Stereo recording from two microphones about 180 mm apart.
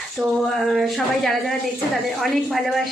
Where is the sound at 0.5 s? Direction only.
Centre (ahead or behind).